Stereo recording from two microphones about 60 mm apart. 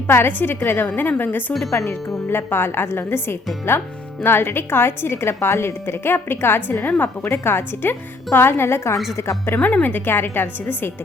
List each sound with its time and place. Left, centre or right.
0.1 s a woman's voice: left
9.6 s a woman's voice: left